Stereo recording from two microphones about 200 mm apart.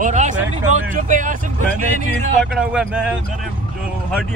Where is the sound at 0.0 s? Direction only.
40° right (ahead or behind).